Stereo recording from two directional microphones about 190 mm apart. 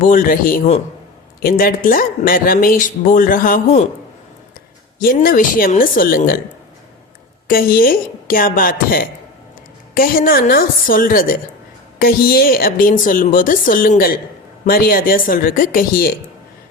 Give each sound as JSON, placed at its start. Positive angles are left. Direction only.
{"t": 0.0, "sound": "speech", "side_deg": 45}
{"t": 4.9, "sound": "speech", "side_deg": 50}
{"t": 7.4, "sound": "speech", "side_deg": 50}